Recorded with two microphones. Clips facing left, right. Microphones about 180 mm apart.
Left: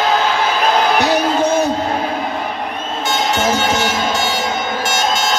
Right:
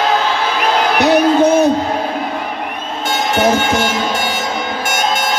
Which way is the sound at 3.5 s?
55° right (ahead or behind).